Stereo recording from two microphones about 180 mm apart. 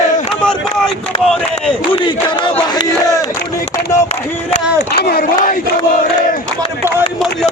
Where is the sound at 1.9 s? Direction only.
25° left (ahead or behind).